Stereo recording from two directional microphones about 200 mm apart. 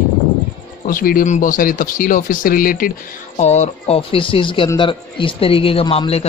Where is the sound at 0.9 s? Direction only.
45° left (ahead or behind).